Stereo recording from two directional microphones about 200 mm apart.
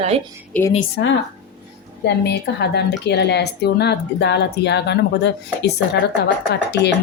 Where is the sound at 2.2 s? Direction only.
55° left (ahead or behind).